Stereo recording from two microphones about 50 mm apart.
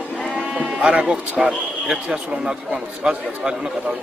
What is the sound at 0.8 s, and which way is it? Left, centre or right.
A man's voice, right.